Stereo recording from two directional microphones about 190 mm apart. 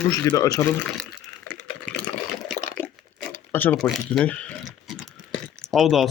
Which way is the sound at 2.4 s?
5° left (ahead or behind).